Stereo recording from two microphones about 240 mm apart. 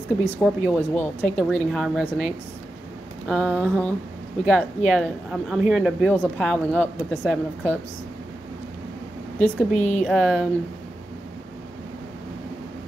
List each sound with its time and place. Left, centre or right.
0.2 s speech: centre
9.8 s a woman's voice: left
10.0 s speech: centre